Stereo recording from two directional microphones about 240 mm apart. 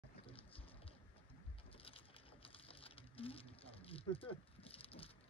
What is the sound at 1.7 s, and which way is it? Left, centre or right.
Patter, left.